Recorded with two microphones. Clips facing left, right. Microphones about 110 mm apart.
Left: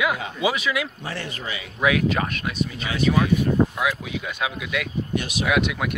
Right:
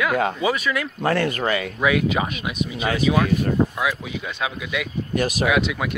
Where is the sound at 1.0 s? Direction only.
55° right (ahead or behind).